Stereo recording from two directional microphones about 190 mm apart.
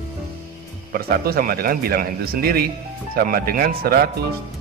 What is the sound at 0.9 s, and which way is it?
Speech, 50° right (ahead or behind).